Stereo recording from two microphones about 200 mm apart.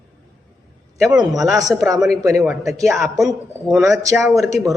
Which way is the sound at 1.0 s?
Centre (ahead or behind).